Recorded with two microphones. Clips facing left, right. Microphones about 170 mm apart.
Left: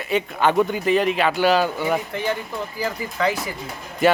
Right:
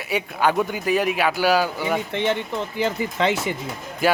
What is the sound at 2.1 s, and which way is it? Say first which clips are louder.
Speech: right 2 dB; 25° right (ahead or behind).